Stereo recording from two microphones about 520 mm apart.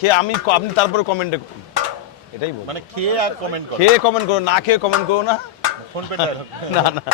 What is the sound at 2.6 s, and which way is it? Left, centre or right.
Speech, right.